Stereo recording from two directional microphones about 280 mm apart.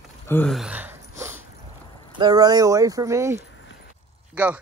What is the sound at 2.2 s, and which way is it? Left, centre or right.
Speech, centre.